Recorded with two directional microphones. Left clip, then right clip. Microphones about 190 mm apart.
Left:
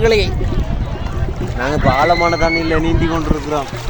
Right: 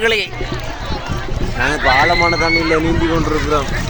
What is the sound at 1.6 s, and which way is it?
Speech, 70° left (ahead or behind).